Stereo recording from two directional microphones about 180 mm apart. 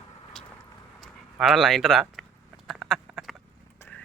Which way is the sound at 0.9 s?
Centre (ahead or behind).